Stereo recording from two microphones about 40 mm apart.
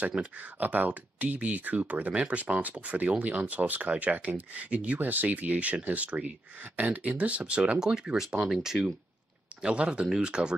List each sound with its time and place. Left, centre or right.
0.4 s speech: right
5.0 s speech: right
7.8 s speech: centre
9.6 s speech: right